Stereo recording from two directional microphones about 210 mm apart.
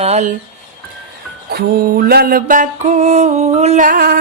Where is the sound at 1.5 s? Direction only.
45° right (ahead or behind).